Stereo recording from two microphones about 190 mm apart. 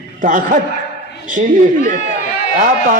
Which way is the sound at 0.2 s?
45° right (ahead or behind).